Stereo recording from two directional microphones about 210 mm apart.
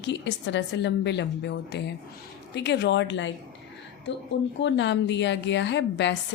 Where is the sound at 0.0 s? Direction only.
55° left (ahead or behind).